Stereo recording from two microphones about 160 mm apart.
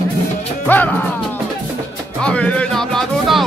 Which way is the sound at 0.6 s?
10° left (ahead or behind).